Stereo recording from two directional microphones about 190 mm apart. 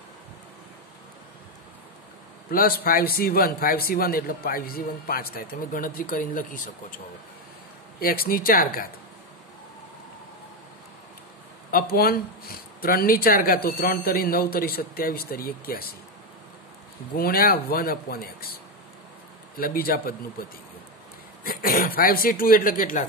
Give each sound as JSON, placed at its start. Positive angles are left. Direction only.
{"t": 2.5, "sound": "speech", "side_deg": 50}
{"t": 8.0, "sound": "speech", "side_deg": 50}
{"t": 11.7, "sound": "speech", "side_deg": 50}
{"t": 17.1, "sound": "speech", "side_deg": 50}
{"t": 19.5, "sound": "speech", "side_deg": 50}
{"t": 21.5, "sound": "speech", "side_deg": 50}